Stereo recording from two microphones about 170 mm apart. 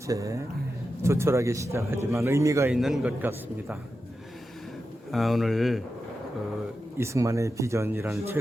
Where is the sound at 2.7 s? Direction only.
5° right (ahead or behind).